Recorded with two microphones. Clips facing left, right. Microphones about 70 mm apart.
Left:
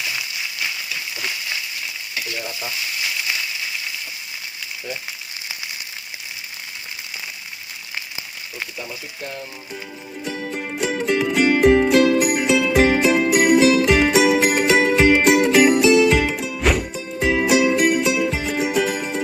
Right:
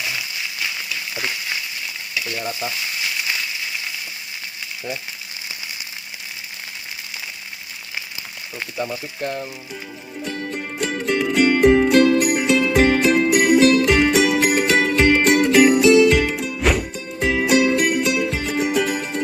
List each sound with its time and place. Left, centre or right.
8.8 s speech: right
10.2 s music: centre